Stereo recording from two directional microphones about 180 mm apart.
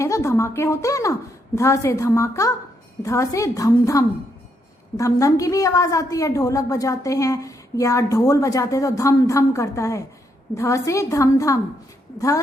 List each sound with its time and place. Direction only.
0.0 s a woman's voice: 15° left (ahead or behind)